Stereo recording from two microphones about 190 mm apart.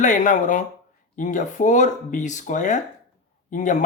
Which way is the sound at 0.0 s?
40° left (ahead or behind).